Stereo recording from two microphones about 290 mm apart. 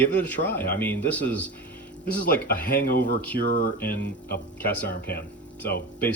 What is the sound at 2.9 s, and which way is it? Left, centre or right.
Speech, left.